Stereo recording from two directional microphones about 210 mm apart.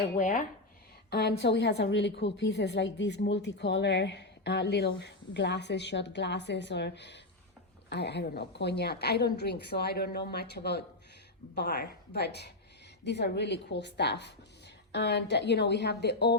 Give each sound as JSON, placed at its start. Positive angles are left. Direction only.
{"t": 0.0, "sound": "speech", "side_deg": 35}
{"t": 1.1, "sound": "a woman's voice", "side_deg": 50}